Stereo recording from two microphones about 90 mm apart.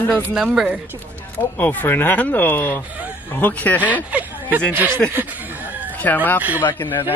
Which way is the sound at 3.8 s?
15° right (ahead or behind).